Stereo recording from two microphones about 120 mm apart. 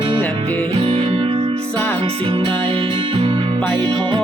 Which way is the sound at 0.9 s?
50° right (ahead or behind).